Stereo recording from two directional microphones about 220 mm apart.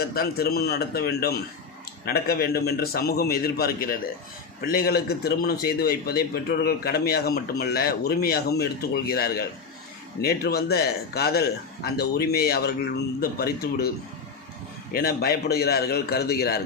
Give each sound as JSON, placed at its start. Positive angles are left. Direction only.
{"t": 0.0, "sound": "a man's voice", "side_deg": 45}
{"t": 14.9, "sound": "a man's voice", "side_deg": 45}